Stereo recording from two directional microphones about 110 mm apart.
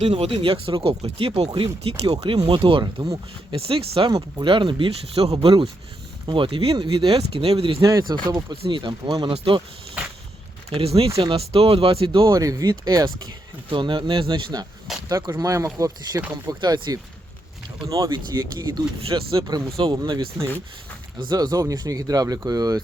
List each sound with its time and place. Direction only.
0.0 s speech: 60° right (ahead or behind)
7.8 s speech: 30° right (ahead or behind)
9.3 s speech: 60° right (ahead or behind)
10.7 s speech: 65° right (ahead or behind)
12.4 s speech: 30° right (ahead or behind)
13.7 s speech: 50° right (ahead or behind)
15.1 s speech: 30° right (ahead or behind)
18.9 s speech: 55° right (ahead or behind)
19.7 s speech: 45° right (ahead or behind)